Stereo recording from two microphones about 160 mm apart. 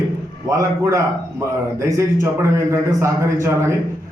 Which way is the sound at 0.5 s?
20° right (ahead or behind).